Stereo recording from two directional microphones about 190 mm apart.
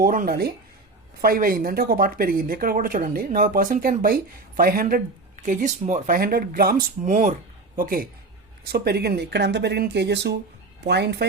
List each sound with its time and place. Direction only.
0.0 s speech: 50° right (ahead or behind)
6.1 s speech: 50° right (ahead or behind)